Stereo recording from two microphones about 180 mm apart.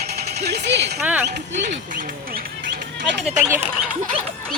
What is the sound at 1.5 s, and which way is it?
Speech, 45° right (ahead or behind).